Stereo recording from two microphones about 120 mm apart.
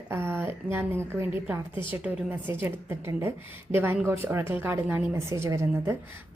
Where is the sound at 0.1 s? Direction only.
20° right (ahead or behind).